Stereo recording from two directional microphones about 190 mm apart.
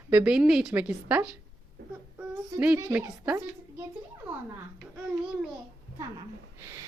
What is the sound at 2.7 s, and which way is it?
Speech, 20° right (ahead or behind).